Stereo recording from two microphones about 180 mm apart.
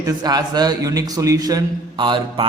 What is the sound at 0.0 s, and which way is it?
A man's voice, 20° right (ahead or behind).